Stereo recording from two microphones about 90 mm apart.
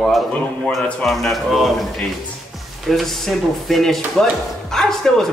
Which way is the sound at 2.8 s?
Centre (ahead or behind).